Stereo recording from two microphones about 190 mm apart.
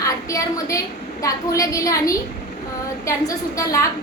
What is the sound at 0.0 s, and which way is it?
A woman's voice, 15° left (ahead or behind).